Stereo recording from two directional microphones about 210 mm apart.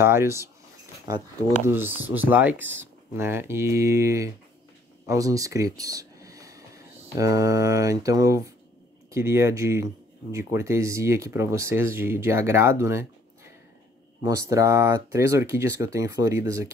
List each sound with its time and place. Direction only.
0.0 s speech: 10° right (ahead or behind)
1.7 s speech: 10° right (ahead or behind)
5.0 s a sound: 15° right (ahead or behind)
7.2 s speech: 15° right (ahead or behind)
14.2 s speech: 15° right (ahead or behind)